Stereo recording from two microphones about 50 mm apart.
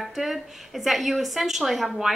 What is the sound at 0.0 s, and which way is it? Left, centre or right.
A woman's voice, centre.